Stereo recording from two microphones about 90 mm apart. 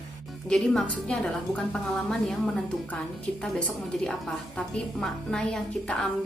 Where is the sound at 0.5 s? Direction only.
10° left (ahead or behind).